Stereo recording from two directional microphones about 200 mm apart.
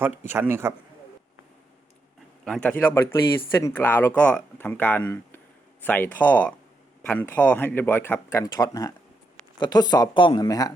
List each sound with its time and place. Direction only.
0.0 s a man's voice: 10° right (ahead or behind)
2.4 s speech: 5° left (ahead or behind)